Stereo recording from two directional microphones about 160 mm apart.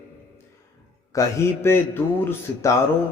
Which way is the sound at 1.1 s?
20° left (ahead or behind).